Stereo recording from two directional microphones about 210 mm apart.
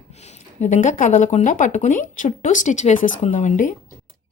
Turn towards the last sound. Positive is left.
turn(degrees=35)  # may be behind; listen again after turning